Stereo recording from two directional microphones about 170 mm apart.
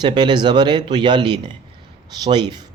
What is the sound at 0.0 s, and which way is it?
A man's voice, 25° right (ahead or behind).